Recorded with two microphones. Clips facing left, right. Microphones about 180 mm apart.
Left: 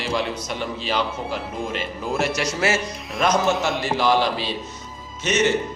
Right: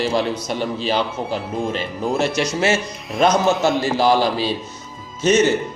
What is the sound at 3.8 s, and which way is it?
Speech, 35° right (ahead or behind).